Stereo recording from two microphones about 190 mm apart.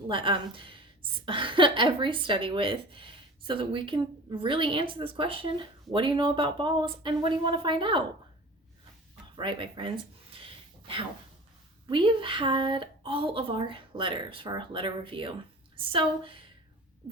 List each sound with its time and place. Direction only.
0.1 s a woman's voice: 25° right (ahead or behind)
9.3 s a woman's voice: 25° right (ahead or behind)
10.4 s a sound: 30° right (ahead or behind)
11.9 s a woman's voice: 25° right (ahead or behind)